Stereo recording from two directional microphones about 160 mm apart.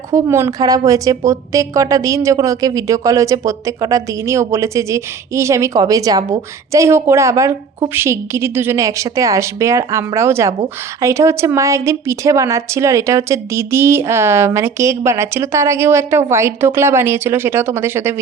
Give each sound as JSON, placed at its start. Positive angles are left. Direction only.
{"t": 0.1, "sound": "a woman's voice", "side_deg": -15}